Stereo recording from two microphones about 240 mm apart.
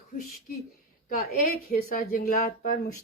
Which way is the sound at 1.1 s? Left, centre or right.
Left.